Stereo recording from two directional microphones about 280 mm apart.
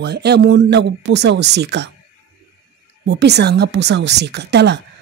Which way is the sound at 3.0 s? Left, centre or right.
Right.